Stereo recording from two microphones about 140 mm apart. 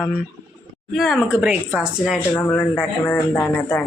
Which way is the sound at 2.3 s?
20° left (ahead or behind).